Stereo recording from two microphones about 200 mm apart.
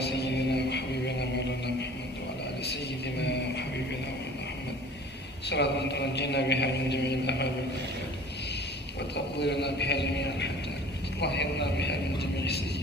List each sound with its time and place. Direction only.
0.2 s music: 55° left (ahead or behind)
3.2 s music: 60° left (ahead or behind)
5.5 s mantra: 60° left (ahead or behind)
9.4 s mantra: 60° left (ahead or behind)